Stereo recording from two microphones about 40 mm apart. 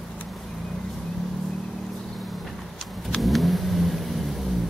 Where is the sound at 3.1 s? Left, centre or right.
Centre.